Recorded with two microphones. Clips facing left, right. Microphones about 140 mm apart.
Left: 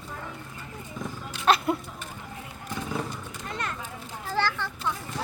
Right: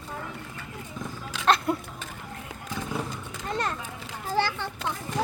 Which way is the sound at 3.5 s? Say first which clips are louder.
Right 5 dB; 35° right (ahead or behind).